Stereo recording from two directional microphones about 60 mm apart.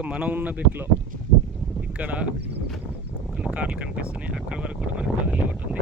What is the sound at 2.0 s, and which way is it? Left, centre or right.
Speech, right.